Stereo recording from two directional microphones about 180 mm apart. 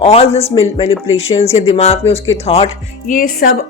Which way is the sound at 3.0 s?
50° left (ahead or behind).